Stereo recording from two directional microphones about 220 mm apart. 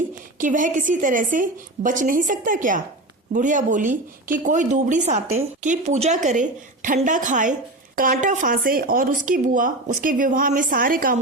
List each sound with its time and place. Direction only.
0.3 s speech: 35° right (ahead or behind)